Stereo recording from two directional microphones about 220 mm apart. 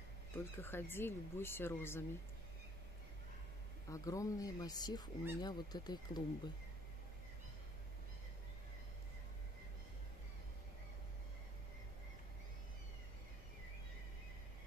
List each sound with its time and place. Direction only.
0.6 s speech: 10° left (ahead or behind)
3.9 s speech: 15° left (ahead or behind)